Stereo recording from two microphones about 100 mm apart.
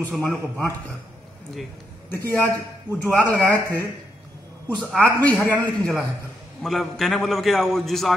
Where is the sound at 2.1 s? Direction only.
25° left (ahead or behind).